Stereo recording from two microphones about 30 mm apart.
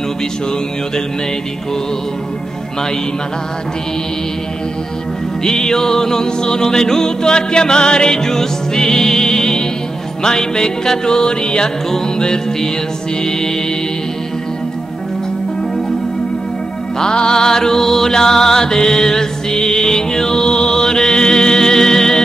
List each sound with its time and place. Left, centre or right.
5.4 s music: left
17.0 s music: left